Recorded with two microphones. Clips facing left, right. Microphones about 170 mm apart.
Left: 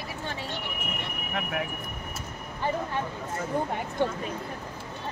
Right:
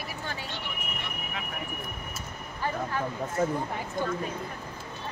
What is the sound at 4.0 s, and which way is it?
Speech, 70° left (ahead or behind).